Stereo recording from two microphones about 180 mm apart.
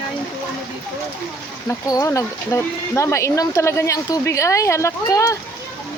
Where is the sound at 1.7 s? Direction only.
20° left (ahead or behind).